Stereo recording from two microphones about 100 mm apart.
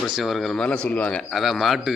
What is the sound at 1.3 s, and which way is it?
Speech, centre (ahead or behind).